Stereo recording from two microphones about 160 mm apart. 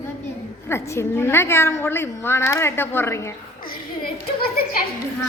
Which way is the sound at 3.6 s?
65° left (ahead or behind).